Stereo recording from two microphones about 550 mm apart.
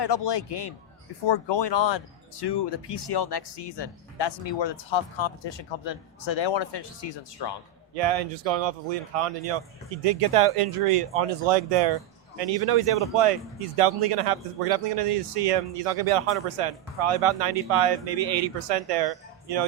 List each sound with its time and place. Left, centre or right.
0.0 s speech: left
7.9 s speech: right